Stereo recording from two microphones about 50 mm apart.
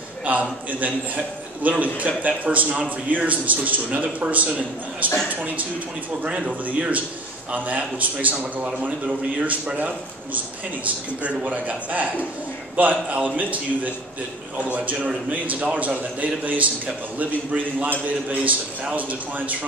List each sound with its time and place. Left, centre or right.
0.2 s a man's voice: right
6.6 s a man's voice: right
11.2 s a man's voice: right